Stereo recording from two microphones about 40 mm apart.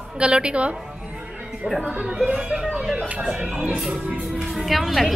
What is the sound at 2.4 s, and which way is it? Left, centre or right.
Music, centre.